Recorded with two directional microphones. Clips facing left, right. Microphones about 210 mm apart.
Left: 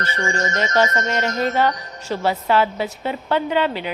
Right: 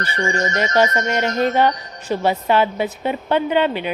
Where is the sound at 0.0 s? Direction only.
15° right (ahead or behind).